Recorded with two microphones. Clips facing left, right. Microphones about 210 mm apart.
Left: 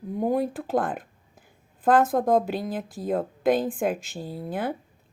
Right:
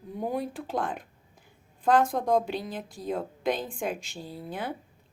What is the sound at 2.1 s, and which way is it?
A woman's voice, 50° left (ahead or behind).